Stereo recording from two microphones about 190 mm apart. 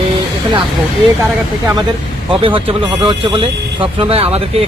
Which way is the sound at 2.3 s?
25° right (ahead or behind).